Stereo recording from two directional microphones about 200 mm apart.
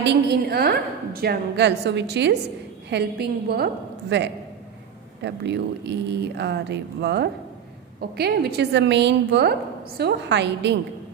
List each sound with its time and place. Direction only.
0.0 s a woman's voice: 55° right (ahead or behind)